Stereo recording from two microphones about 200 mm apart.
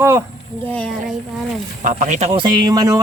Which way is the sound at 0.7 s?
5° left (ahead or behind).